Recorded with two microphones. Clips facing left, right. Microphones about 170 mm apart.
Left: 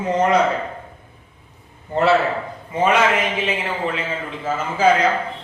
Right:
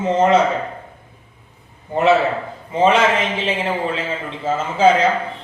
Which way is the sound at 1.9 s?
20° right (ahead or behind).